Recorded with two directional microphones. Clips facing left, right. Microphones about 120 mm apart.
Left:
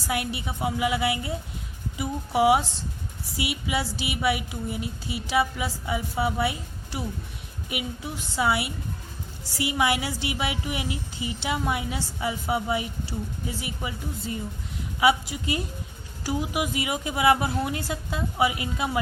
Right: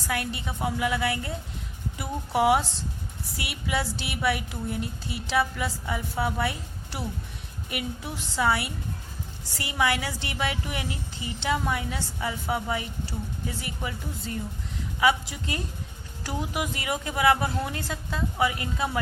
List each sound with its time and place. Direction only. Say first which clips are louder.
0.1 s speech: left 2 dB; 10° left (ahead or behind)
8.4 s speech: even; 10° left (ahead or behind)